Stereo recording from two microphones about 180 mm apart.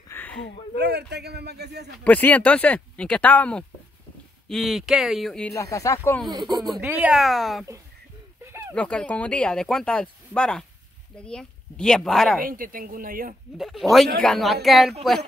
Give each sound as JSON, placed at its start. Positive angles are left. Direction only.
{"t": 0.1, "sound": "a sound", "side_deg": 10}
{"t": 0.7, "sound": "a man's voice", "side_deg": -65}
{"t": 2.0, "sound": "speech", "side_deg": 10}
{"t": 5.5, "sound": "speech", "side_deg": 15}
{"t": 6.2, "sound": "speech", "side_deg": -20}
{"t": 6.8, "sound": "speech", "side_deg": -10}
{"t": 8.4, "sound": "a sound", "side_deg": -15}
{"t": 8.7, "sound": "speech", "side_deg": 5}
{"t": 12.4, "sound": "speech", "side_deg": -50}
{"t": 13.6, "sound": "speech", "side_deg": 0}